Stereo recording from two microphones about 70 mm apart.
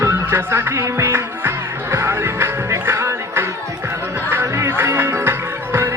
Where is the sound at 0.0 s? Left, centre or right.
Right.